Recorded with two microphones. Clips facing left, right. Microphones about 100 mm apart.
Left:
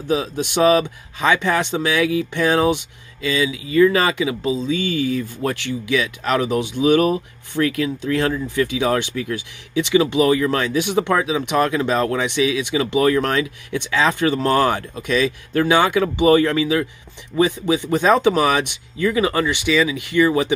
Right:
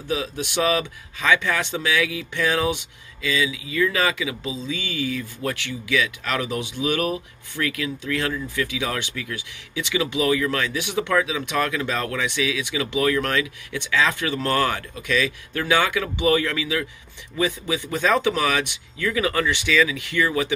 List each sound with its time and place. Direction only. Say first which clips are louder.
0.1 s speech: left 5 dB; 30° left (ahead or behind)